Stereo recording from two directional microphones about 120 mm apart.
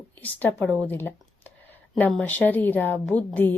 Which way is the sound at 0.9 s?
15° left (ahead or behind).